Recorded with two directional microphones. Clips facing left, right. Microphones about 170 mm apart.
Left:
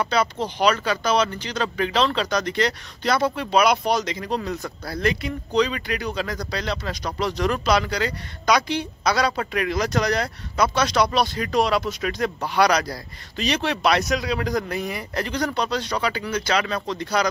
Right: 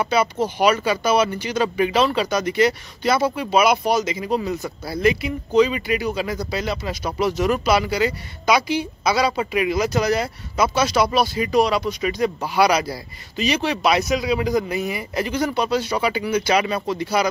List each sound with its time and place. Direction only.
0.0 s speech: 5° right (ahead or behind)